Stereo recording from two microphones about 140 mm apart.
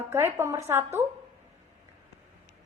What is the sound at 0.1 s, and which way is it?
Speech, 20° right (ahead or behind).